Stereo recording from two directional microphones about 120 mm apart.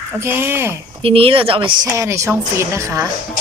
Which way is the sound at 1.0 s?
50° right (ahead or behind).